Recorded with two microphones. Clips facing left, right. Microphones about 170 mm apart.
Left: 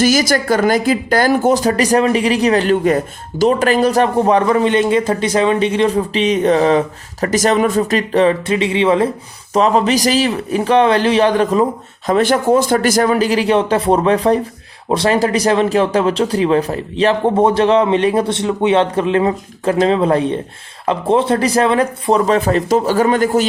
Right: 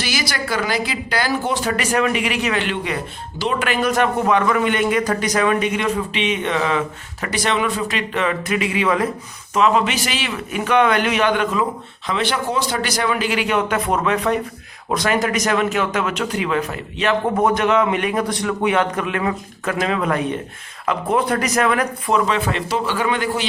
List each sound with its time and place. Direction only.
0.0 s speech: 45° left (ahead or behind)
12.0 s speech: 45° left (ahead or behind)